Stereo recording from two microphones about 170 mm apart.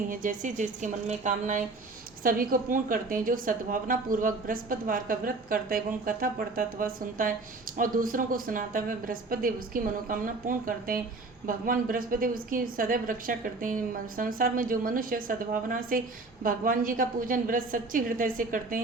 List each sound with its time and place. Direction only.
0.1 s a woman's voice: 50° right (ahead or behind)